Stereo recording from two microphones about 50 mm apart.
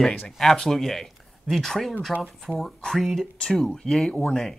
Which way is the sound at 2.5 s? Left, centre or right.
Centre.